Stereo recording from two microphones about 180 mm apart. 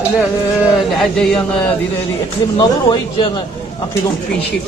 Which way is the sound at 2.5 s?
25° left (ahead or behind).